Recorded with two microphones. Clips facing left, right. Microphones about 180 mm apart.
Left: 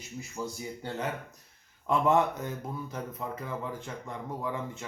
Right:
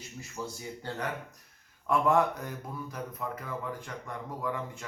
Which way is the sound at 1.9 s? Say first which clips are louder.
Left 1 dB; 20° left (ahead or behind).